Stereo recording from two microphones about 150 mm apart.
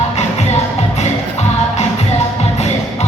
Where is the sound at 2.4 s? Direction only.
45° left (ahead or behind).